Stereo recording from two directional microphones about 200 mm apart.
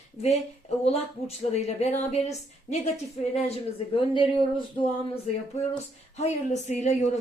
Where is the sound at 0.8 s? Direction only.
30° left (ahead or behind).